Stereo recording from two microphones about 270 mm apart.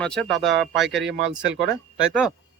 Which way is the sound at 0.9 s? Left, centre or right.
Right.